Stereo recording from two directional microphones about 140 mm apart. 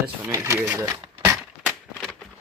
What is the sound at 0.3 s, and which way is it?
Speech, 20° right (ahead or behind).